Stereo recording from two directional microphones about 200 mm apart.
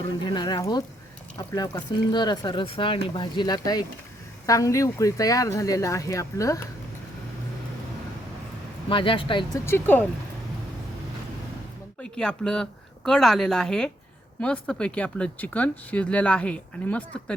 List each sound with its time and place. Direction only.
0.3 s speech: 20° left (ahead or behind)
8.9 s speech: 25° left (ahead or behind)
9.6 s speech: 10° left (ahead or behind)
12.1 s a woman's voice: 5° left (ahead or behind)